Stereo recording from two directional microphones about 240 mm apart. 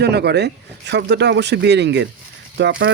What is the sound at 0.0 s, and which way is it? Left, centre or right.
Speech, right.